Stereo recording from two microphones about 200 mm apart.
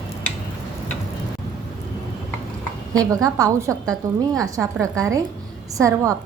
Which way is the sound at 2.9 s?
15° right (ahead or behind).